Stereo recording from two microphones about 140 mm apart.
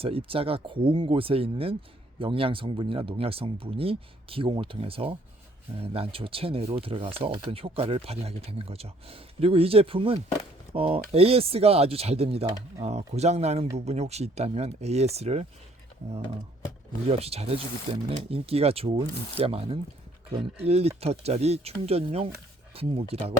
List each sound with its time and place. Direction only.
0.0 s speech: 40° right (ahead or behind)
17.1 s speech: 45° right (ahead or behind)